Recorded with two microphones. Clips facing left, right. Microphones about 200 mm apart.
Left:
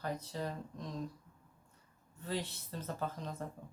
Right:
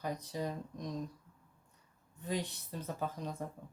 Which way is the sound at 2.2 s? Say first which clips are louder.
Right 2 dB; 15° right (ahead or behind).